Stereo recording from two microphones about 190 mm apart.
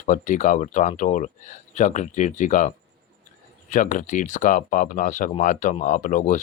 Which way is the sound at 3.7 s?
40° left (ahead or behind).